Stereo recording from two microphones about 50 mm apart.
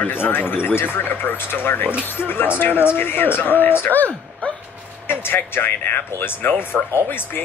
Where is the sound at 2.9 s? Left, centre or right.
Left.